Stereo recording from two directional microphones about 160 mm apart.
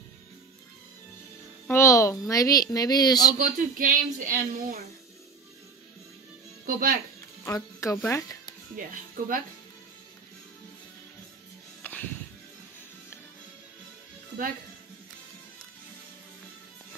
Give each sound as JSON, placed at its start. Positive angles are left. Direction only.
{"t": 1.7, "sound": "a woman's voice", "side_deg": 20}
{"t": 3.3, "sound": "speech", "side_deg": -55}
{"t": 6.6, "sound": "speech", "side_deg": -65}
{"t": 7.4, "sound": "speech", "side_deg": 15}
{"t": 11.8, "sound": "music", "side_deg": 10}